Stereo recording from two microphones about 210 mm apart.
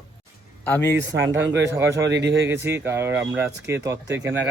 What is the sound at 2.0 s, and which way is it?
Speech, 55° right (ahead or behind).